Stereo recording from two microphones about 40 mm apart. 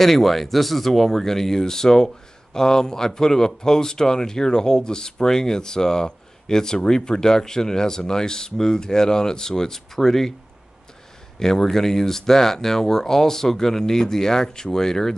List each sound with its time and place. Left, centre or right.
0.0 s speech: centre
11.3 s speech: centre